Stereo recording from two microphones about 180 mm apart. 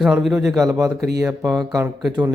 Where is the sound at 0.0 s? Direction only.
Centre (ahead or behind).